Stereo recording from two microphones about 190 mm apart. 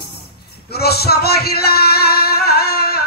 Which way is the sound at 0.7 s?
55° left (ahead or behind).